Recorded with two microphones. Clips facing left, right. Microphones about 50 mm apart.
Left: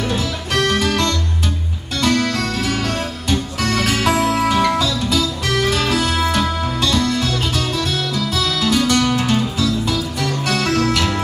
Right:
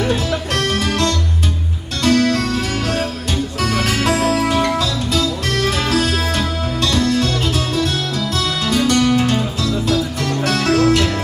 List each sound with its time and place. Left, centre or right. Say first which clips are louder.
0.0 s music: right 3 dB; centre